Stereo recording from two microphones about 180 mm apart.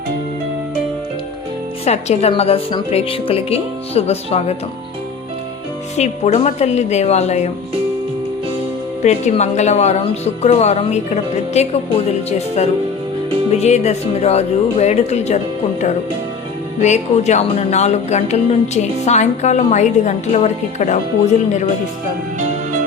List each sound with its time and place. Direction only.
1.8 s speech: 35° left (ahead or behind)
6.0 s speech: 40° left (ahead or behind)
9.0 s speech: 40° left (ahead or behind)
16.8 s speech: 40° left (ahead or behind)